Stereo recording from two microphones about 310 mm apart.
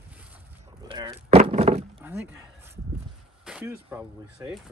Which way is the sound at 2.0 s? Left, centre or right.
Centre.